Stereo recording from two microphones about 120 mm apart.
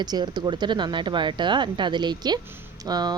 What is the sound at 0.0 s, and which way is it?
Speech, 35° right (ahead or behind).